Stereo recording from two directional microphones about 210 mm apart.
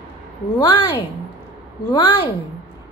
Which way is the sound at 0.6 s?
20° left (ahead or behind).